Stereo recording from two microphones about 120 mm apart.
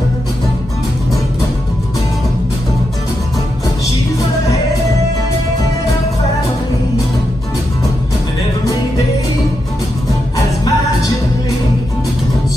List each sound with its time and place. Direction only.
10.3 s music: 30° left (ahead or behind)